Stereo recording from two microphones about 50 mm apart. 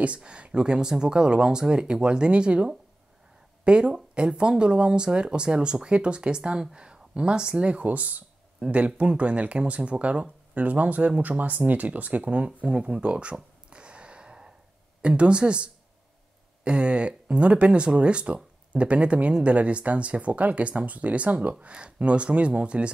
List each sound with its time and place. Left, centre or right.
0.0 s speech: right
12.6 s a sound: centre
15.0 s speech: right